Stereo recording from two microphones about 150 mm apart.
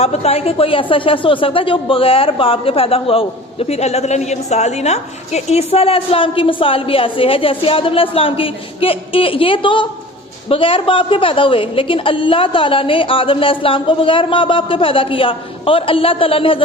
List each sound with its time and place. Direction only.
0.0 s speech: 45° left (ahead or behind)